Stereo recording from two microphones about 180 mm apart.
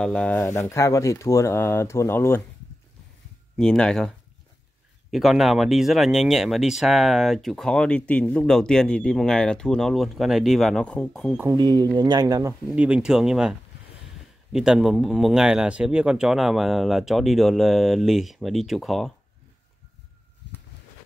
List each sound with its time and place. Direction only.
0.0 s speech: 5° left (ahead or behind)
0.4 s speech: 15° left (ahead or behind)
3.5 s speech: 5° left (ahead or behind)
5.1 s speech: centre (ahead or behind)
11.3 s speech: 20° right (ahead or behind)
12.7 s speech: 5° right (ahead or behind)